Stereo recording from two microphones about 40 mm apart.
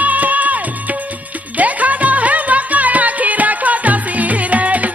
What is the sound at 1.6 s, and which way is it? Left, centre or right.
Music, right.